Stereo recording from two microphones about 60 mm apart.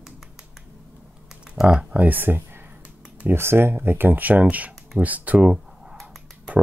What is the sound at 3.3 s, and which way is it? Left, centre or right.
Speech, right.